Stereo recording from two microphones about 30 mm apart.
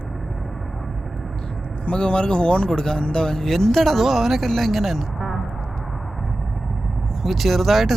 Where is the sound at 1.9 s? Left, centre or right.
Left; by 5.4 s centre.